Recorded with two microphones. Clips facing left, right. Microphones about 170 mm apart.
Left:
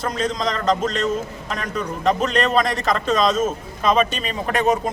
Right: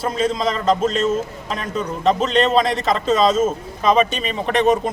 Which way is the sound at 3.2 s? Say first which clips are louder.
Right 4 dB; 25° right (ahead or behind).